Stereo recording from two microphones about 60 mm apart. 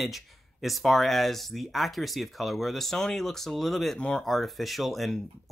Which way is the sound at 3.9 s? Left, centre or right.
Centre.